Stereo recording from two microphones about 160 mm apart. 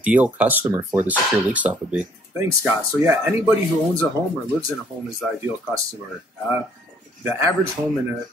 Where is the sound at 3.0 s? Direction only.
20° right (ahead or behind).